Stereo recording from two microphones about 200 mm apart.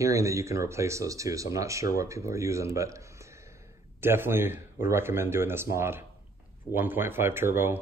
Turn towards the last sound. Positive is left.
turn(degrees=-10)  # may be behind; listen again after turning